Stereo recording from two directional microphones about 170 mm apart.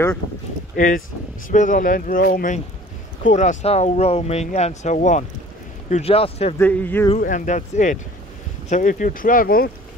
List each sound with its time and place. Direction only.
0.7 s speech: 55° left (ahead or behind); by 6.5 s 35° left (ahead or behind)
6.6 s speech: 10° left (ahead or behind)
7.2 s speech: 50° left (ahead or behind)